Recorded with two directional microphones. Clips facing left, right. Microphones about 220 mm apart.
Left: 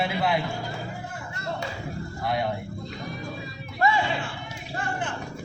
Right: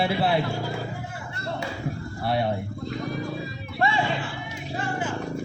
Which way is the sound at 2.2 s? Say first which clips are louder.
Right 2 dB; 30° right (ahead or behind).